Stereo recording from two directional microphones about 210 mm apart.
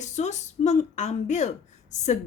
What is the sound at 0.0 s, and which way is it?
Speech, 35° left (ahead or behind).